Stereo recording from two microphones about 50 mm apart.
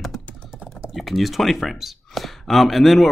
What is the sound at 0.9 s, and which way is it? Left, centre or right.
Speech, centre.